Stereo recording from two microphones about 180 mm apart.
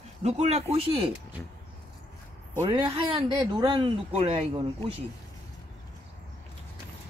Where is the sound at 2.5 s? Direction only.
25° right (ahead or behind).